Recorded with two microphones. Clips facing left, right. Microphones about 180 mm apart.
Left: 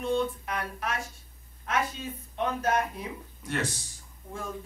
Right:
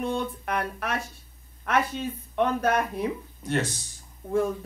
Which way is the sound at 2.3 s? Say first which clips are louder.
Right 4 dB; 65° right (ahead or behind).